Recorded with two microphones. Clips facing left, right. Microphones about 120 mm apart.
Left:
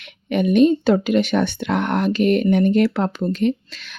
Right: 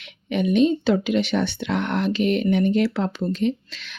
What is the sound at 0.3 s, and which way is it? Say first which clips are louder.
Speech: left 4 dB; 55° left (ahead or behind).